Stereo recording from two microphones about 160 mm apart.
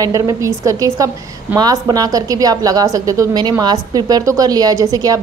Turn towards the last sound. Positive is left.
turn(degrees=-20)  # may be behind; listen again after turning